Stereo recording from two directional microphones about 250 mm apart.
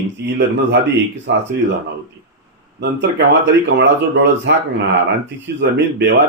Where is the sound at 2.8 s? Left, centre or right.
Right.